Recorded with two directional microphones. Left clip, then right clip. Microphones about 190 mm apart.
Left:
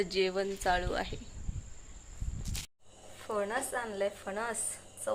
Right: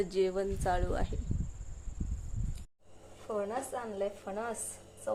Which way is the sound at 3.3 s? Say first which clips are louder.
Left 2 dB; 5° left (ahead or behind).